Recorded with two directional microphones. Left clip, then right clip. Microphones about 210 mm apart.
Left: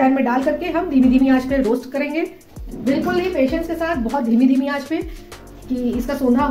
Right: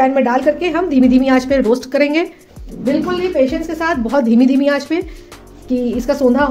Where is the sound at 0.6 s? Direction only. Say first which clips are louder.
Right 4 dB; 50° right (ahead or behind).